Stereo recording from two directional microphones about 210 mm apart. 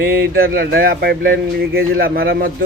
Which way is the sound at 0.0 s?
45° right (ahead or behind).